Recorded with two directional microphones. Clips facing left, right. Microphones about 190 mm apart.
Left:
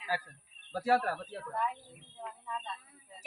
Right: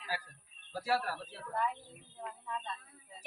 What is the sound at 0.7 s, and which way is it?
Speech, 50° left (ahead or behind).